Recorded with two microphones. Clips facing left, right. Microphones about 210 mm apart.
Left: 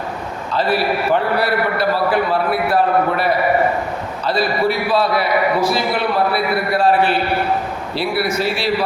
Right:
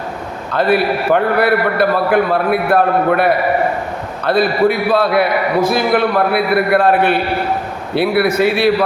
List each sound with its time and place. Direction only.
0.5 s a man's voice: 55° right (ahead or behind)